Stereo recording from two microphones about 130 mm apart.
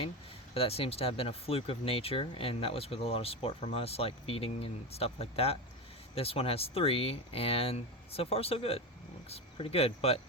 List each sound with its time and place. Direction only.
0.5 s speech: 50° left (ahead or behind)